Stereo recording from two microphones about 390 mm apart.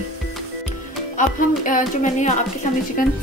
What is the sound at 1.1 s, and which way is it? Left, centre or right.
Speech, centre.